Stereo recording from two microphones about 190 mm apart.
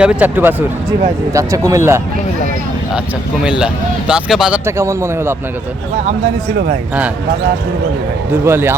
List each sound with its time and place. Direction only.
0.0 s speech: 5° right (ahead or behind)
3.6 s speech: 5° right (ahead or behind)
8.3 s speech: 10° right (ahead or behind)